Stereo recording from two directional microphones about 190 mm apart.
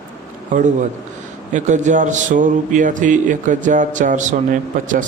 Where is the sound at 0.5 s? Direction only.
40° right (ahead or behind).